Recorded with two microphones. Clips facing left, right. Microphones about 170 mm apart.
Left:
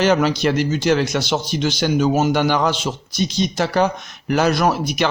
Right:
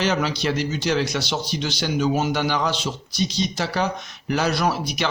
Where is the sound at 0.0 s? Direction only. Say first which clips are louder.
Left 6 dB; 55° left (ahead or behind).